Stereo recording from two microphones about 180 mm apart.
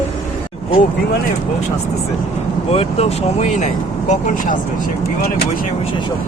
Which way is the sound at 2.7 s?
35° left (ahead or behind).